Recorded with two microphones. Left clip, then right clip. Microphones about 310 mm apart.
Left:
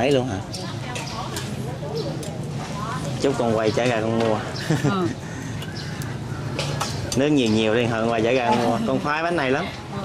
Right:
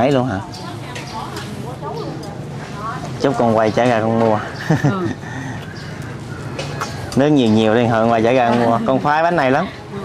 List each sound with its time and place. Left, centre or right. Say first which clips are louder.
0.0 s speech: right 5 dB; centre
3.2 s speech: right 7 dB; centre
7.2 s speech: right 6 dB; centre